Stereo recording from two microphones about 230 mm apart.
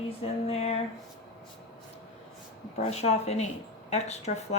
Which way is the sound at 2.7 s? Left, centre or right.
Left.